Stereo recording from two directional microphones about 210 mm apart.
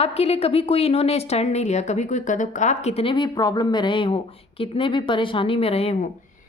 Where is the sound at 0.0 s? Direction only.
30° left (ahead or behind).